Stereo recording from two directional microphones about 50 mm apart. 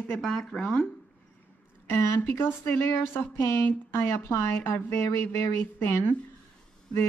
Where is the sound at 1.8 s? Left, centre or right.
Left.